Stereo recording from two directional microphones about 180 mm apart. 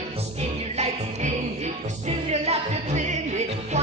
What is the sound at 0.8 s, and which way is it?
Music, 40° right (ahead or behind).